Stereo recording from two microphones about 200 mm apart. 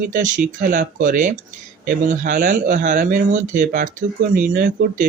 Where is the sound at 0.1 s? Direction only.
40° right (ahead or behind).